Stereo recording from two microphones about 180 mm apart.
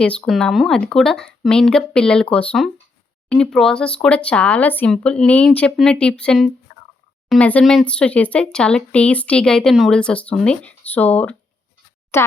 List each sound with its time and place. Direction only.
0.0 s speech: 5° left (ahead or behind)
6.7 s a sound: 80° left
7.3 s speech: 5° left (ahead or behind)